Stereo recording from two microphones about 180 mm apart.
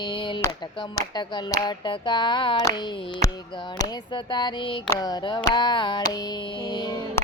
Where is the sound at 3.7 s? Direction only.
25° left (ahead or behind).